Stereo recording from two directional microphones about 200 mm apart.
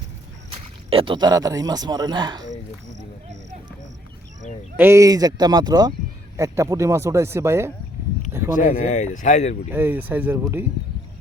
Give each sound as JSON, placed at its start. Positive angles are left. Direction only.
{"t": 0.5, "sound": "speech", "side_deg": -25}
{"t": 4.8, "sound": "speech", "side_deg": -15}
{"t": 8.5, "sound": "speech", "side_deg": 40}
{"t": 9.6, "sound": "speech", "side_deg": -10}